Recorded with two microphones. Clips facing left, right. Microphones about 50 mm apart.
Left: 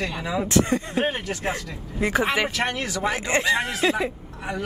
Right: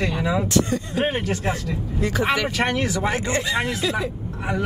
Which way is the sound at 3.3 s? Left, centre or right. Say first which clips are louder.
Left 1 dB; left.